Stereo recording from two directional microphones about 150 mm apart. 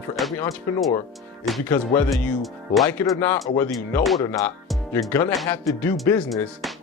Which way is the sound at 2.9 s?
15° left (ahead or behind).